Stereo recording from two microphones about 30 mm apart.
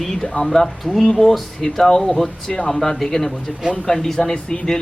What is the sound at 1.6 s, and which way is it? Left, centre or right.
Speech, centre.